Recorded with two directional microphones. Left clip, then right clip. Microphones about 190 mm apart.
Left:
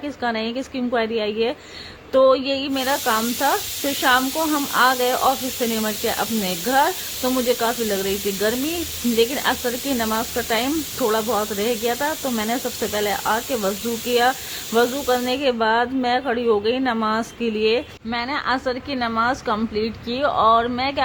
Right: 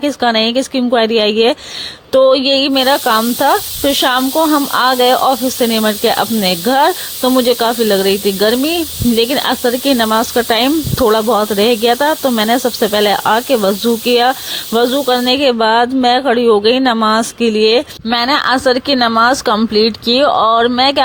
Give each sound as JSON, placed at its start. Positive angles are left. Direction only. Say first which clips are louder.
{"t": 0.0, "sound": "speech", "louder": "right 12 dB", "side_deg": -35}